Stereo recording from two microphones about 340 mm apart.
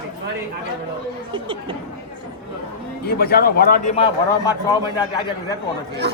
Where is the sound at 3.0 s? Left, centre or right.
Left; by 5.5 s centre.